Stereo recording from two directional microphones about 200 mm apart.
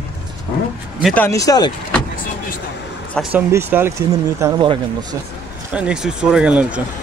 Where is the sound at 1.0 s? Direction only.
10° left (ahead or behind).